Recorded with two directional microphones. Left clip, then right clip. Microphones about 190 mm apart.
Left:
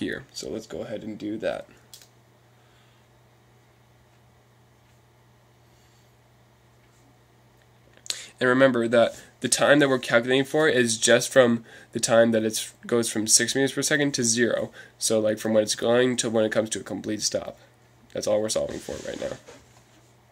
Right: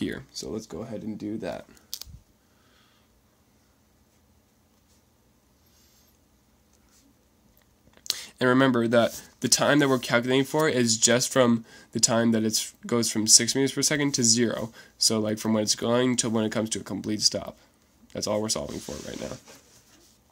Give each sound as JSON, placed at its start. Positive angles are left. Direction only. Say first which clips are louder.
{"t": 0.0, "sound": "speech", "louder": "left 2 dB", "side_deg": -35}
{"t": 8.0, "sound": "speech", "louder": "even", "side_deg": -40}